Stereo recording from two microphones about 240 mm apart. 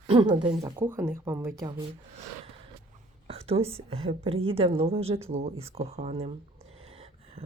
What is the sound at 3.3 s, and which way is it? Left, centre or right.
Speech, right.